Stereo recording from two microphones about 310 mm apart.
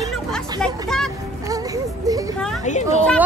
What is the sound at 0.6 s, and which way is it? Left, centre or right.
Speech, centre.